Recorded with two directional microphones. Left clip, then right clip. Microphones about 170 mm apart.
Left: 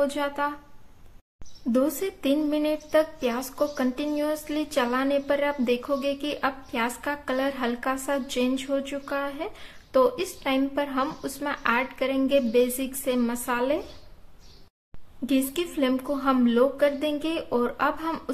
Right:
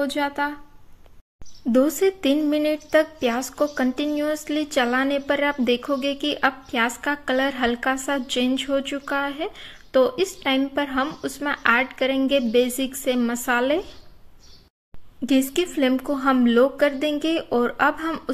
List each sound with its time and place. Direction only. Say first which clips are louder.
0.0 s a woman's voice: right 2 dB; 20° right (ahead or behind)
1.7 s a woman's voice: right 6 dB; 25° right (ahead or behind)
15.2 s a woman's voice: right 5 dB; 25° right (ahead or behind)